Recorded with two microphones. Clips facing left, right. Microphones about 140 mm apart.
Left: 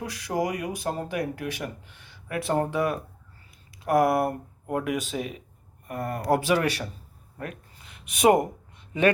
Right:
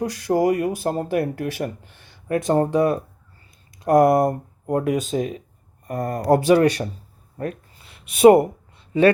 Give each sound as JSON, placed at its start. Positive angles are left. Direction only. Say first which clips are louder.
{"t": 0.4, "sound": "speech", "louder": "right 9 dB", "side_deg": -50}
{"t": 7.3, "sound": "a sound", "louder": "right 8 dB", "side_deg": -35}
{"t": 8.1, "sound": "speech", "louder": "right 8 dB", "side_deg": -30}